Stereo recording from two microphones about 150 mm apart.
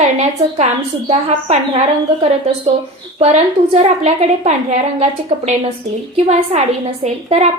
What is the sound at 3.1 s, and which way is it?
A woman's voice, 45° right (ahead or behind).